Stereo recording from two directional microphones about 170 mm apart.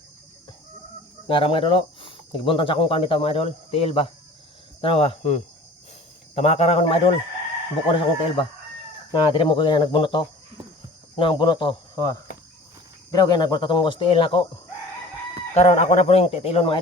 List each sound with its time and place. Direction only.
1.3 s speech: 30° left (ahead or behind)
15.5 s speech: 45° left (ahead or behind)